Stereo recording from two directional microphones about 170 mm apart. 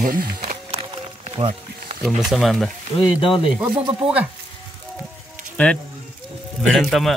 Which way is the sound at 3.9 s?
10° right (ahead or behind).